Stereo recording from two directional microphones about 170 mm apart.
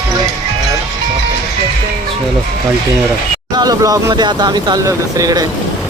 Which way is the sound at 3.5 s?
20° right (ahead or behind).